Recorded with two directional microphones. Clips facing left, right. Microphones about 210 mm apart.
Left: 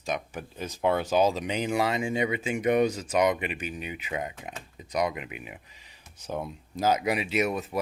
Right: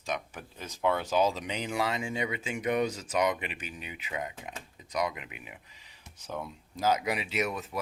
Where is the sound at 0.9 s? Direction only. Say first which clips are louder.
Left 5 dB; 10° left (ahead or behind).